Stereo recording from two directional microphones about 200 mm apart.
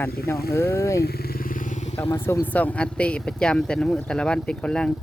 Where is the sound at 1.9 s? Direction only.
10° left (ahead or behind).